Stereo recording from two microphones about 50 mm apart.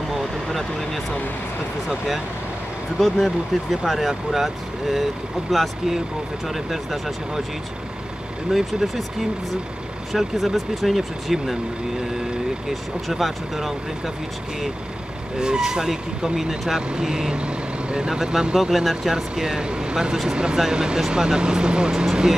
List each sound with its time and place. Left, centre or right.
0.1 s vehicle: centre
3.0 s speech: centre
8.5 s speech: centre
10.1 s speech: centre
12.6 s speech: centre
15.3 s speech: centre